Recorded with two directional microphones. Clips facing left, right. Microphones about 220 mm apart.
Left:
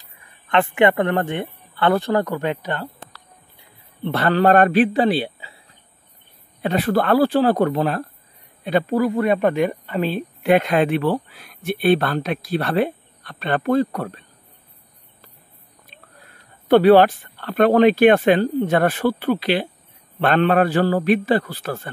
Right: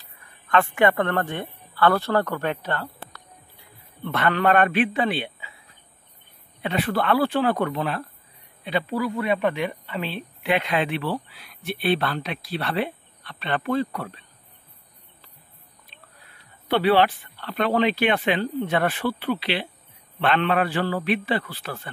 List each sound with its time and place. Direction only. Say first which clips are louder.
0.0 s speech: even; 20° left (ahead or behind)
4.0 s a man's voice: left 5 dB; 35° left (ahead or behind)
6.6 s a man's voice: left 5 dB; 40° left (ahead or behind)
15.9 s a sound: left 3 dB; 50° left (ahead or behind)
16.6 s speech: left 8 dB; 45° left (ahead or behind)